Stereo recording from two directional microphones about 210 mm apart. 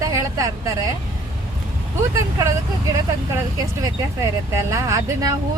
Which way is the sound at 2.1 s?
15° right (ahead or behind).